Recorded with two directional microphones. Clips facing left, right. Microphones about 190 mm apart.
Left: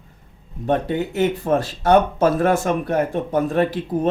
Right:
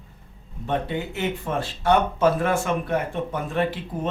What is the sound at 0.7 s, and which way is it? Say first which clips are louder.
Speech: left 6 dB; 40° left (ahead or behind).